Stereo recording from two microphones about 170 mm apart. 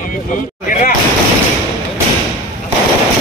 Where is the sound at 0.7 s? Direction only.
50° left (ahead or behind).